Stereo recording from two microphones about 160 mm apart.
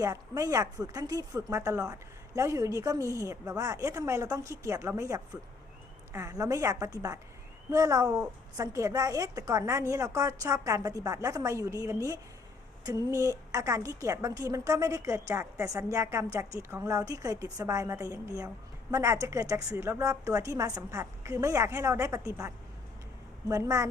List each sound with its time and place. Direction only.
0.0 s a woman's voice: 20° right (ahead or behind)